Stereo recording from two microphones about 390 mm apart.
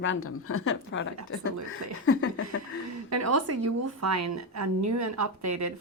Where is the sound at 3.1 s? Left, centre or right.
Right.